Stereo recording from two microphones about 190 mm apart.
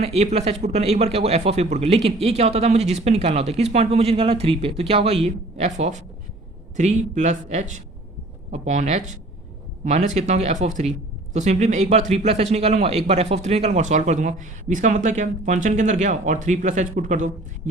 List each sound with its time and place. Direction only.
0.0 s a man's voice: 35° right (ahead or behind)